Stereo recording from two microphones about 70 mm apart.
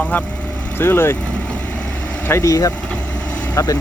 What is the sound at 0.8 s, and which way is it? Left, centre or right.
Speech, left.